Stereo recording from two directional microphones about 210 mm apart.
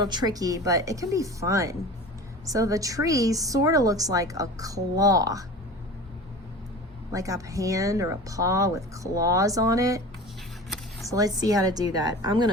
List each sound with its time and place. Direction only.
0.0 s a woman's voice: 20° right (ahead or behind)
7.1 s a woman's voice: 15° right (ahead or behind)
11.1 s a woman's voice: 15° right (ahead or behind)